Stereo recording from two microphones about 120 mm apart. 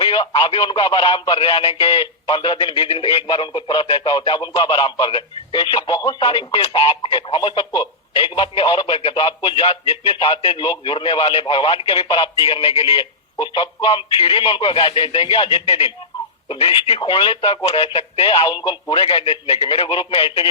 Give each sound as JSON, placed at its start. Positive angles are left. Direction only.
{"t": 0.0, "sound": "speech", "side_deg": 40}
{"t": 19.6, "sound": "speech", "side_deg": 45}